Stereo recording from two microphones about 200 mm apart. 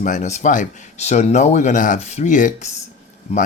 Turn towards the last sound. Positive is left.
turn(degrees=30)  # may be behind; listen again after turning